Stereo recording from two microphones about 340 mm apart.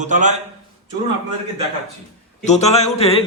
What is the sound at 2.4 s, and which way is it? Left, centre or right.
Speech, centre.